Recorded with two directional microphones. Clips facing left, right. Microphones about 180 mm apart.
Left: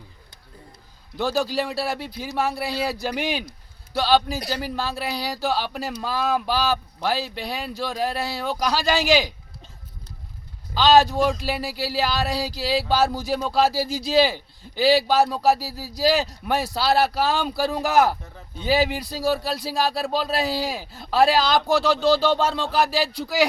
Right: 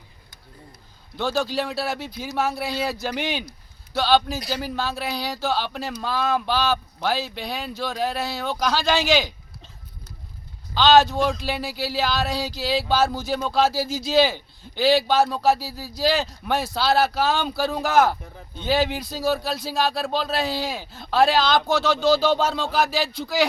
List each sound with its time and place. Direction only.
1.2 s speech: centre (ahead or behind)
2.6 s speech: 35° left (ahead or behind)
3.9 s speech: centre (ahead or behind)
10.8 s speech: 35° left (ahead or behind)
11.1 s speech: 5° left (ahead or behind)
13.8 s speech: 35° left (ahead or behind)
14.1 s speech: centre (ahead or behind)
15.4 s speech: 35° left (ahead or behind)
16.1 s speech: centre (ahead or behind)